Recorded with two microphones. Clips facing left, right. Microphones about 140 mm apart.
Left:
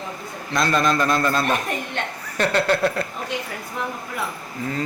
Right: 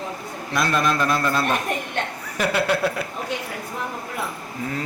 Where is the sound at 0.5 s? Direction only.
5° right (ahead or behind).